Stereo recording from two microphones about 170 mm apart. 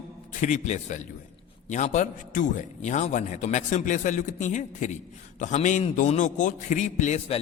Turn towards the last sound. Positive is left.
turn(degrees=35)  # may be behind; listen again after turning